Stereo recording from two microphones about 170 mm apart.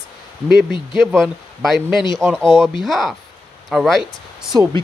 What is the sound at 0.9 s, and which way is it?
Speech, centre (ahead or behind).